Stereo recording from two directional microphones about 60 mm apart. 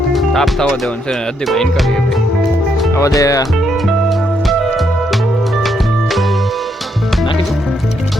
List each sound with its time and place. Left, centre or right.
0.1 s music: centre
1.5 s speech: centre
3.2 s speech: left